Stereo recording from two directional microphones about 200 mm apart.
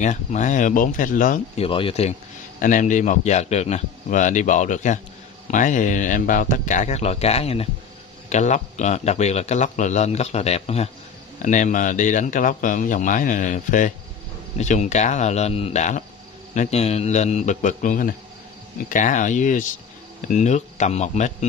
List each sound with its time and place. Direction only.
0.0 s a man's voice: 35° left (ahead or behind)
1.7 s speech: 25° left (ahead or behind)
2.6 s a man's voice: 40° left (ahead or behind)